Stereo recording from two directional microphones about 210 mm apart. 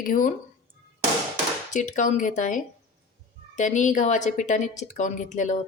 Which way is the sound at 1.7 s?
35° left (ahead or behind).